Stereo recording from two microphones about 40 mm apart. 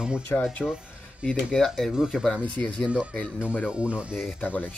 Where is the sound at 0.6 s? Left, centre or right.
Centre.